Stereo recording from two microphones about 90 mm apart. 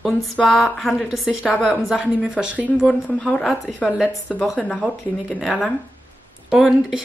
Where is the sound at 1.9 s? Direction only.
10° right (ahead or behind).